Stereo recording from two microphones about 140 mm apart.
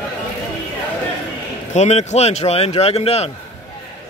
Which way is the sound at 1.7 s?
55° left (ahead or behind).